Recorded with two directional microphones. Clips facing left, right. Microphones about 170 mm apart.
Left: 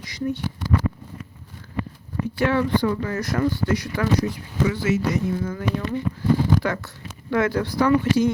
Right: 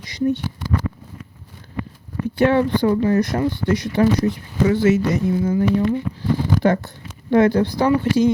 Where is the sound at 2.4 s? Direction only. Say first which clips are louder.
Right 5 dB; 25° right (ahead or behind).